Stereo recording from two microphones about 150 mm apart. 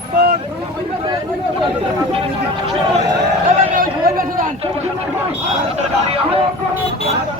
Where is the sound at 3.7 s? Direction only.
70° right (ahead or behind).